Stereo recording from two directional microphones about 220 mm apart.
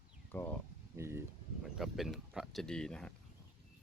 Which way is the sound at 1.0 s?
10° right (ahead or behind).